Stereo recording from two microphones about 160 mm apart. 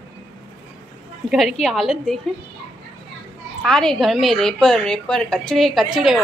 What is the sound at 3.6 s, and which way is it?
A woman's voice, 5° left (ahead or behind).